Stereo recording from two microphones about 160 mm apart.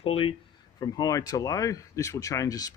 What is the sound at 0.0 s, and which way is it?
Speech, 35° left (ahead or behind).